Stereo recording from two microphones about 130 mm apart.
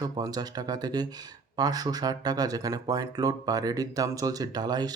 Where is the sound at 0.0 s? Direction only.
30° right (ahead or behind).